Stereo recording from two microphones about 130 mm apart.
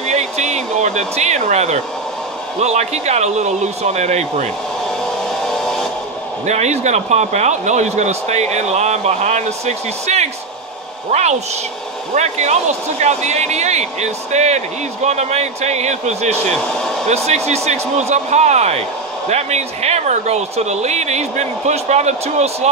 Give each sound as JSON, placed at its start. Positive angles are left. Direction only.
{"t": 0.0, "sound": "speech", "side_deg": -60}
{"t": 5.3, "sound": "a sound", "side_deg": 5}
{"t": 6.4, "sound": "speech", "side_deg": -60}